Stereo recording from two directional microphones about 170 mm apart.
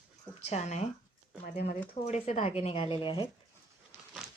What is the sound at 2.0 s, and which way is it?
Speech, 40° left (ahead or behind).